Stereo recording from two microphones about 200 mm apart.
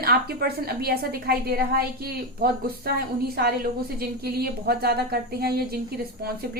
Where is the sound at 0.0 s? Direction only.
50° right (ahead or behind).